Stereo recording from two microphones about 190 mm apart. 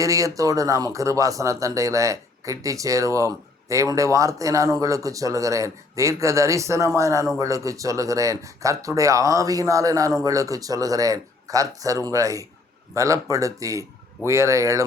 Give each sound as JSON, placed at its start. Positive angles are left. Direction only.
{"t": 0.0, "sound": "speech", "side_deg": -15}